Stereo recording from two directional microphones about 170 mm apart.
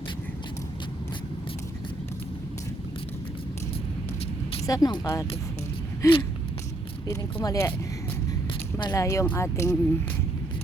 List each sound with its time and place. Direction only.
4.6 s speech: 20° left (ahead or behind)
8.8 s speech: 20° left (ahead or behind)